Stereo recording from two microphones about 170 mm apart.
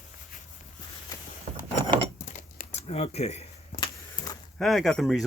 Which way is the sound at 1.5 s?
40° right (ahead or behind).